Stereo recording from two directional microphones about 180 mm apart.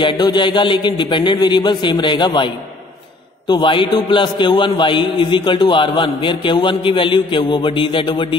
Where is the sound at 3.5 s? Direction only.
25° left (ahead or behind).